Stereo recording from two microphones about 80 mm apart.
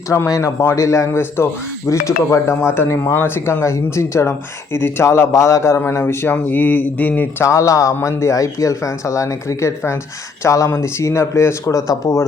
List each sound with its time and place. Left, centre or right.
0.3 s speech: left
7.4 s speech: left